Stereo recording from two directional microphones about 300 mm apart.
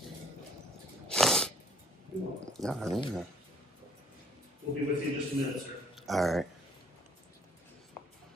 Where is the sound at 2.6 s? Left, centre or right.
Centre.